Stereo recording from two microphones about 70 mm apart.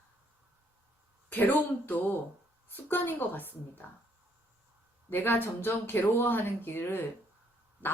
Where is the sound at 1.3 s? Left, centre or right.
Left.